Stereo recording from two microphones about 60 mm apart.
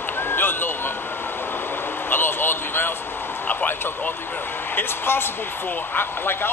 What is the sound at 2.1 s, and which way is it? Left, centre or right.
Speech, left.